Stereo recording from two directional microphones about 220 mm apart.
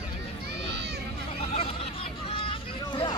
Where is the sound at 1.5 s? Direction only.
25° left (ahead or behind).